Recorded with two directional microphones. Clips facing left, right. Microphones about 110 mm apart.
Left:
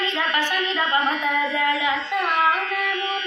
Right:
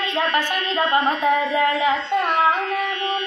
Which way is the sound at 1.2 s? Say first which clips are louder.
Right 4 dB; 35° right (ahead or behind).